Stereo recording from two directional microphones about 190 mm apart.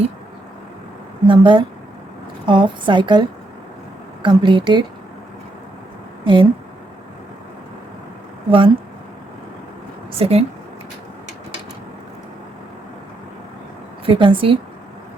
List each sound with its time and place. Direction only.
1.3 s a woman's voice: 25° right (ahead or behind)
6.2 s speech: 25° right (ahead or behind)
8.4 s a woman's voice: 25° right (ahead or behind)
10.2 s speech: 30° right (ahead or behind)
14.0 s a woman's voice: 30° right (ahead or behind)